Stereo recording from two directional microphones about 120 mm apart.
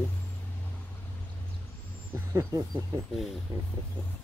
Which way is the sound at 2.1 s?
25° right (ahead or behind).